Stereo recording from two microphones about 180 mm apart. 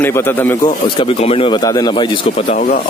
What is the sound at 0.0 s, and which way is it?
Speech, 10° left (ahead or behind).